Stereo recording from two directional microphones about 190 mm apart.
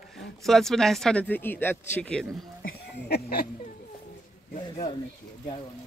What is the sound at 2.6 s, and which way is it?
Speech, 60° left (ahead or behind).